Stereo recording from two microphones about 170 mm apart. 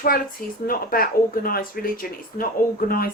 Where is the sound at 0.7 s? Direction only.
55° left (ahead or behind).